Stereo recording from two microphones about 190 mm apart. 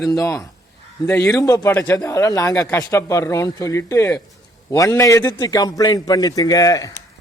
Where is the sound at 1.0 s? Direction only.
10° left (ahead or behind).